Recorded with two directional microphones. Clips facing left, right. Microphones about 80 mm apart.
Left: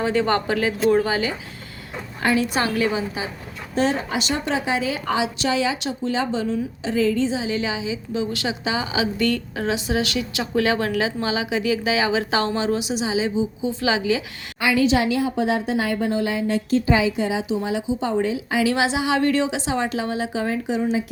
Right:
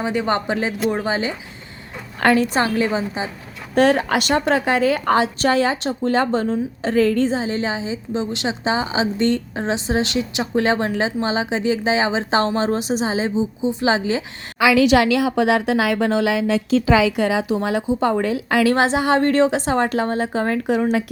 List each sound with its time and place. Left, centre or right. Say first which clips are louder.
0.0 s speech: even; centre
2.2 s a woman's voice: right 4 dB; right
3.8 s a woman's voice: right 6 dB; right
14.8 s a woman's voice: right 2 dB; right
16.9 s a woman's voice: right 5 dB; right